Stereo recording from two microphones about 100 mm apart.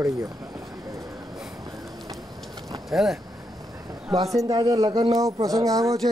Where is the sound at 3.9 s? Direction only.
35° right (ahead or behind).